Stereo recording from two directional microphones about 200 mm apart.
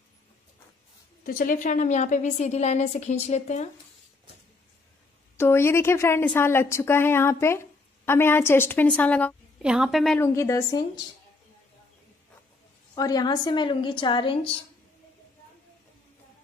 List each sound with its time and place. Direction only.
1.2 s a woman's voice: 45° left (ahead or behind)
5.4 s a woman's voice: 10° left (ahead or behind)
9.6 s a woman's voice: 5° right (ahead or behind)
10.2 s a woman's voice: 15° left (ahead or behind)
12.9 s a woman's voice: 20° left (ahead or behind)